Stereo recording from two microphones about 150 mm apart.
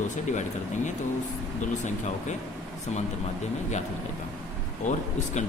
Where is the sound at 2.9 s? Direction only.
50° left (ahead or behind).